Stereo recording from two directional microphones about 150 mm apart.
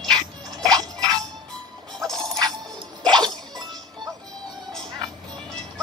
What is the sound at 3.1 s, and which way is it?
Music, 30° right (ahead or behind).